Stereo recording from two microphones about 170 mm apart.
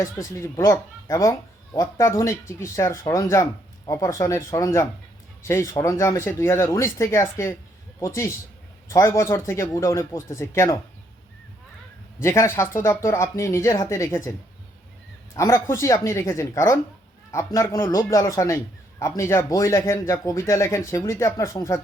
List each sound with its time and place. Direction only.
0.0 s a man's voice: 15° left (ahead or behind)
12.2 s a man's voice: 15° left (ahead or behind)
15.4 s a man's voice: 15° left (ahead or behind)